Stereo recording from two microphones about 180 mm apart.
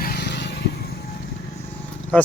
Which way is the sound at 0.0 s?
60° left (ahead or behind).